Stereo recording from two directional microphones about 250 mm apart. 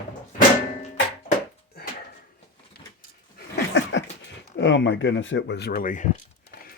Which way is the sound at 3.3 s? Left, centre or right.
Left.